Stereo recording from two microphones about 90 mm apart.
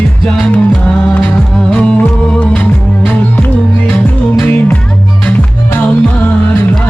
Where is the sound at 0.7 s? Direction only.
10° left (ahead or behind).